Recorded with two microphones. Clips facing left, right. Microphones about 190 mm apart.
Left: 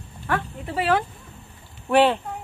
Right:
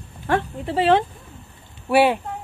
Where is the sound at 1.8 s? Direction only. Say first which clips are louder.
Right 1 dB; 10° right (ahead or behind).